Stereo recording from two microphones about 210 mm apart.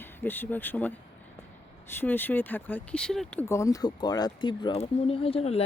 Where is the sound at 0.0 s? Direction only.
10° left (ahead or behind).